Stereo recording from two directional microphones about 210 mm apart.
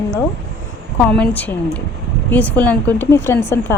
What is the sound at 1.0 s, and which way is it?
Speech, 5° left (ahead or behind).